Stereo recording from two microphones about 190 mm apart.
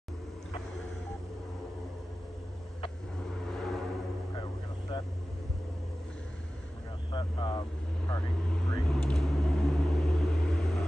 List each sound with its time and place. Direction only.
3.5 s vehicle: centre (ahead or behind)
4.9 s vehicle: 25° left (ahead or behind)
7.1 s vehicle: 25° left (ahead or behind)
8.5 s vehicle: 5° left (ahead or behind)